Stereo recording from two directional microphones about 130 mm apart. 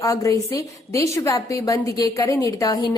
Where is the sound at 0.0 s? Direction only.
25° left (ahead or behind).